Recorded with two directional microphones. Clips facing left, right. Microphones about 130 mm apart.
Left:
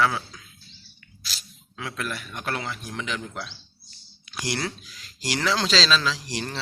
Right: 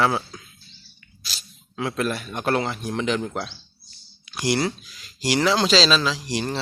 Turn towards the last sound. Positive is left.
turn(degrees=-20)  # may be behind; listen again after turning